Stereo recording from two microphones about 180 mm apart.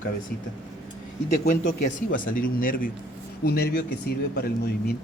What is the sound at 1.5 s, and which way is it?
Speech, 45° left (ahead or behind).